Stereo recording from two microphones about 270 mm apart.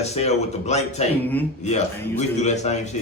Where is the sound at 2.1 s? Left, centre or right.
Left.